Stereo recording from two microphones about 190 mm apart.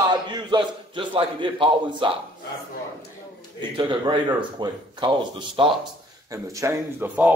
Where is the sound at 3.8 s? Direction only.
25° right (ahead or behind).